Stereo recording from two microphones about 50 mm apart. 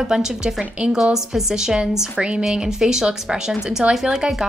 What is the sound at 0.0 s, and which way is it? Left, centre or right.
Speech, centre.